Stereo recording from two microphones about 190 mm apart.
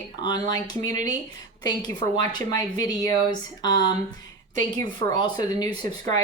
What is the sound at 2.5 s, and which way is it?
Speech, 20° left (ahead or behind).